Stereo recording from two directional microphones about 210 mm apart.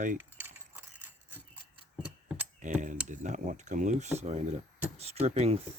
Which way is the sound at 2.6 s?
35° right (ahead or behind).